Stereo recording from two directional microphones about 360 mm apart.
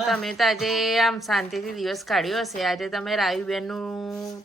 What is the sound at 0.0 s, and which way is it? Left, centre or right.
Speech, centre.